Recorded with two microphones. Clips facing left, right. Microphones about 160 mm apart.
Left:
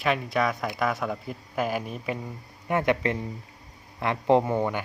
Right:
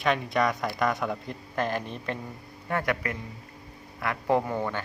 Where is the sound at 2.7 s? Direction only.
20° left (ahead or behind).